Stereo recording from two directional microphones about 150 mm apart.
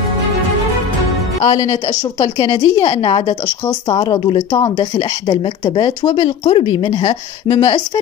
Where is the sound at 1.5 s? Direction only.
25° left (ahead or behind).